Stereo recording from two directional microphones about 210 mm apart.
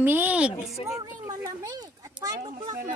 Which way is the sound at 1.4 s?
15° right (ahead or behind).